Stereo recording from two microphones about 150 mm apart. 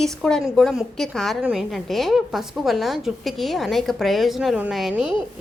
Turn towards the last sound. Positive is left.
turn(degrees=0)  # may be behind; listen again after turning